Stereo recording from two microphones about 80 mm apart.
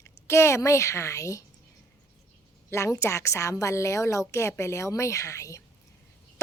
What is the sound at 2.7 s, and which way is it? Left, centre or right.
A woman's voice, left.